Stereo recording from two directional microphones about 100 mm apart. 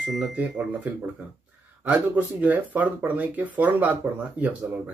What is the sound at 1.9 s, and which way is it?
Speech, 15° right (ahead or behind).